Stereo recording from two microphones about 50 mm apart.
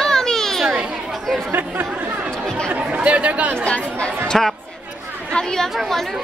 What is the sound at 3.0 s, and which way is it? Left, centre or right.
Speech, right.